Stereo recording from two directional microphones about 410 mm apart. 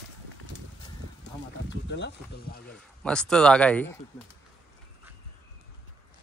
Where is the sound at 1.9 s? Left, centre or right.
Left.